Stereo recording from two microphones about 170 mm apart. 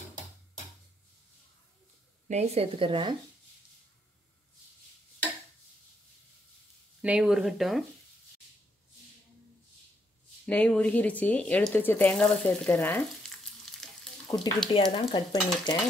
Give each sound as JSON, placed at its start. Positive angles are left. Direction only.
{"t": 2.2, "sound": "speech", "side_deg": -40}
{"t": 7.0, "sound": "speech", "side_deg": -5}
{"t": 10.4, "sound": "speech", "side_deg": 5}
{"t": 14.7, "sound": "speech", "side_deg": 30}